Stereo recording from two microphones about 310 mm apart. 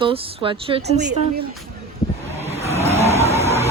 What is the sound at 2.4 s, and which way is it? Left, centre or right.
Vehicle, centre.